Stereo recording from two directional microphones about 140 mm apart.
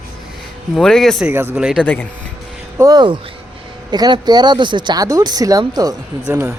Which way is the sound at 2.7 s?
25° right (ahead or behind).